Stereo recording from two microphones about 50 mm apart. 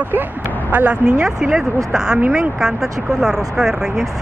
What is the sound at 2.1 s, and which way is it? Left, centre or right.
Speech, right.